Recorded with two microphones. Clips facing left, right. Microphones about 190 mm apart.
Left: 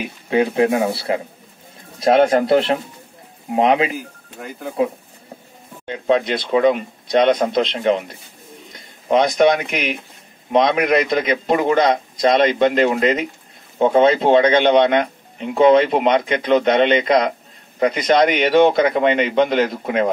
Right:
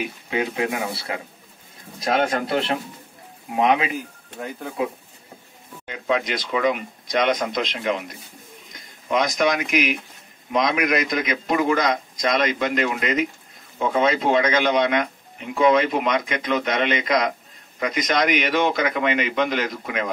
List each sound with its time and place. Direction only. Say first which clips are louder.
0.3 s speech: left 9 dB; 35° left (ahead or behind)
5.9 s a man's voice: left 6 dB; 30° left (ahead or behind)